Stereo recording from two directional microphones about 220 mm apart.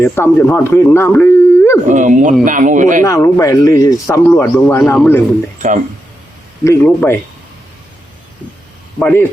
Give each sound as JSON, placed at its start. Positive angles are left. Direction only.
{"t": 0.0, "sound": "speech", "side_deg": 10}
{"t": 1.9, "sound": "speech", "side_deg": -35}
{"t": 3.0, "sound": "speech", "side_deg": 15}
{"t": 5.5, "sound": "speech", "side_deg": -35}
{"t": 6.7, "sound": "speech", "side_deg": 10}
{"t": 9.0, "sound": "speech", "side_deg": 5}